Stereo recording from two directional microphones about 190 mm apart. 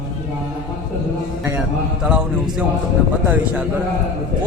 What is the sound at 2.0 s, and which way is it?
Speech, 5° right (ahead or behind).